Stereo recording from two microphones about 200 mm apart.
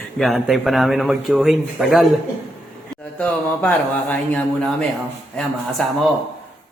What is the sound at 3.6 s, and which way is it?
Speech, 5° left (ahead or behind).